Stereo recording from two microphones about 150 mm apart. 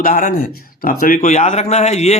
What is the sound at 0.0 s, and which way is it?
Speech, 60° left (ahead or behind).